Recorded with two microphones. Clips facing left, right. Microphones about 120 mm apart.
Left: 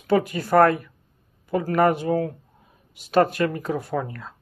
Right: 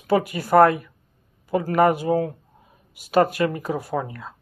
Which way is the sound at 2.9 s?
10° right (ahead or behind).